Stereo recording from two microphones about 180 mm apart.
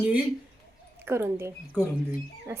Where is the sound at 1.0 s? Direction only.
15° right (ahead or behind).